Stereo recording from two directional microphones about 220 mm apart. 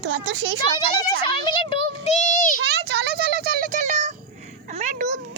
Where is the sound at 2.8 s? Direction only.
50° right (ahead or behind); by 5.1 s 30° right (ahead or behind).